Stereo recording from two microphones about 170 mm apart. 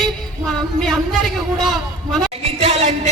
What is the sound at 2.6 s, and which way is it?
Music, 40° right (ahead or behind).